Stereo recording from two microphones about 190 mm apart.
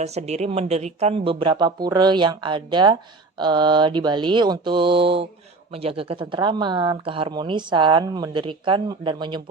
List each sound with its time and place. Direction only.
0.0 s speech: 35° right (ahead or behind)